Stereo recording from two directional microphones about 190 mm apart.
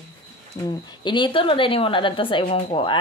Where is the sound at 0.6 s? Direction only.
25° left (ahead or behind).